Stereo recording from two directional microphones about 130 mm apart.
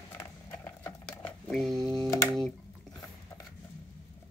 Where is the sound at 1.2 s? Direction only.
5° left (ahead or behind).